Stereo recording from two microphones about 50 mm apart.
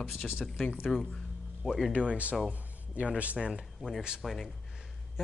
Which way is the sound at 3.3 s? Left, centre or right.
Centre.